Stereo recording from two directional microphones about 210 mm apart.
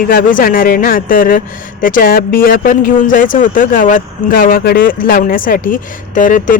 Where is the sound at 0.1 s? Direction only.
40° left (ahead or behind).